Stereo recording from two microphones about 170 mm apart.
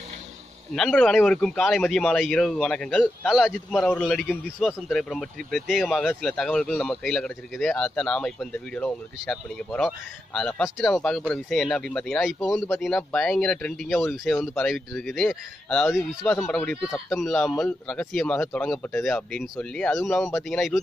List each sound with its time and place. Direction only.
0.7 s speech: 5° left (ahead or behind)